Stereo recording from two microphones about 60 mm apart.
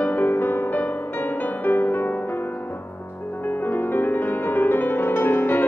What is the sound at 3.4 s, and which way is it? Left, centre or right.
Music, left.